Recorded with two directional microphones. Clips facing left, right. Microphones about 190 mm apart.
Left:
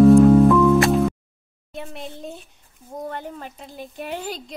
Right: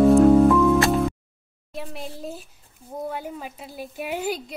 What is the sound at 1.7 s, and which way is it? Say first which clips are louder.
A woman's voice: even; centre (ahead or behind).